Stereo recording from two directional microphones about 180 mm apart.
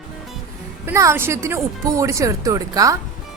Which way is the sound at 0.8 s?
15° right (ahead or behind).